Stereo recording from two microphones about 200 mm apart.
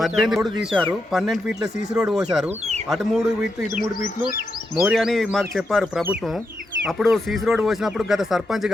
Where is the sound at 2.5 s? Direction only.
35° right (ahead or behind).